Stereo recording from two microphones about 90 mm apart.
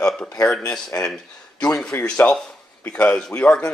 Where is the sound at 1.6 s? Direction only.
10° left (ahead or behind).